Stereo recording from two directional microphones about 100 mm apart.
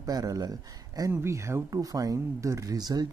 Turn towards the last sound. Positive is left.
turn(degrees=-45)  # may be behind; listen again after turning